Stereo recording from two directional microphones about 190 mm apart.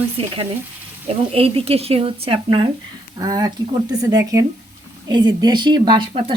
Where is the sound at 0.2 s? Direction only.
30° right (ahead or behind).